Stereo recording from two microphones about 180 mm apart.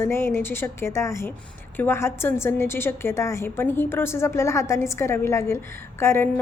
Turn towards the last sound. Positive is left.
turn(degrees=15)  # may be behind; listen again after turning